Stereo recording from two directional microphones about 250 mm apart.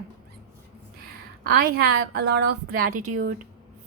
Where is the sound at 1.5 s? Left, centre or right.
Right.